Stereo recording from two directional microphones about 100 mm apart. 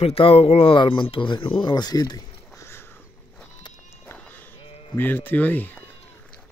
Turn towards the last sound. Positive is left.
turn(degrees=15)  # may be behind; listen again after turning